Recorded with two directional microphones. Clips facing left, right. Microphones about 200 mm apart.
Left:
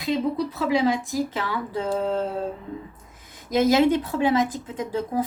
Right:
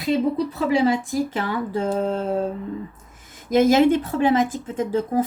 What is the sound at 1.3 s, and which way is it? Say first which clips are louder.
Speech: right 3 dB; 45° right (ahead or behind).